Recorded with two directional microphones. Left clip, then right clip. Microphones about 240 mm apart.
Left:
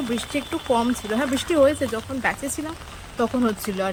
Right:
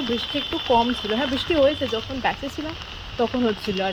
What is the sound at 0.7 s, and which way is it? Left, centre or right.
Speech, centre.